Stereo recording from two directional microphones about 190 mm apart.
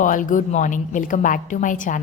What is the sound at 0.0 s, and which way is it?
A woman's voice, 45° left (ahead or behind).